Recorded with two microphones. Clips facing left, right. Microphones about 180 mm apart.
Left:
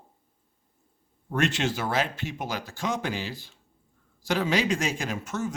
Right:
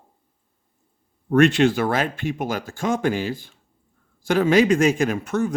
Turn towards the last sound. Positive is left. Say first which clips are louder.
# right 9 dB
turn(degrees=-60)  # may be behind; listen again after turning